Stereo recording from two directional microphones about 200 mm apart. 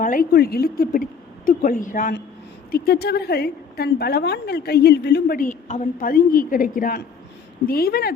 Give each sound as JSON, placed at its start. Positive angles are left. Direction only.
{"t": 0.0, "sound": "a woman's voice", "side_deg": 45}